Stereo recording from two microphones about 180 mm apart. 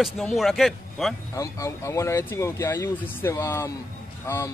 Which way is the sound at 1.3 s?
15° left (ahead or behind).